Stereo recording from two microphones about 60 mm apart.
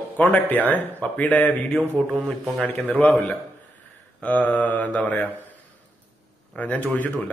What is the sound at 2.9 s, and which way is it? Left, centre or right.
A man's voice, left.